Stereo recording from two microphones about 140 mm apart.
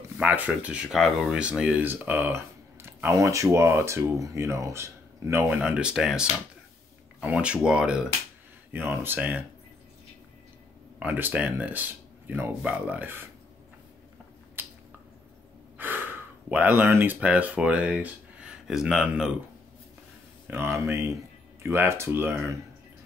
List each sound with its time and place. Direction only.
0.2 s speech: 10° right (ahead or behind)
11.0 s speech: 15° right (ahead or behind)
15.8 s speech: 15° right (ahead or behind)
20.4 s speech: 15° right (ahead or behind)